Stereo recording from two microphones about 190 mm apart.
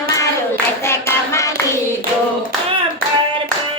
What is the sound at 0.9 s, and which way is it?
Hands, 15° left (ahead or behind).